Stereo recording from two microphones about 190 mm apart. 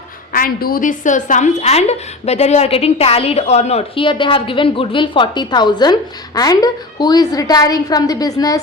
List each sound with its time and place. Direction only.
0.3 s a woman's voice: 50° left (ahead or behind); by 8.6 s 20° left (ahead or behind)